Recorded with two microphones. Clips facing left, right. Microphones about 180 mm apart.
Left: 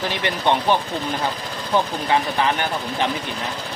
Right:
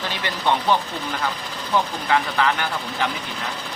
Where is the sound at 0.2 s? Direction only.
20° left (ahead or behind).